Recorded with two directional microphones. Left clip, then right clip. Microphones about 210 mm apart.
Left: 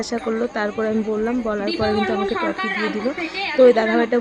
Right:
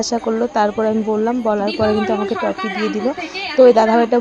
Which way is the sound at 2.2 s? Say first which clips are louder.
Right 2 dB; 45° right (ahead or behind).